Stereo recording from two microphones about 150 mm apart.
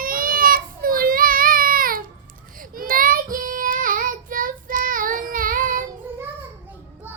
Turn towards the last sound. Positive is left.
turn(degrees=-65)  # may be behind; listen again after turning